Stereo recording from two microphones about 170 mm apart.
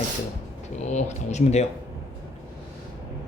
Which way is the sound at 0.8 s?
40° left (ahead or behind).